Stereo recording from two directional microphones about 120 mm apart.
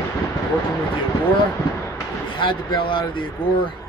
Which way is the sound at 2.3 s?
45° left (ahead or behind).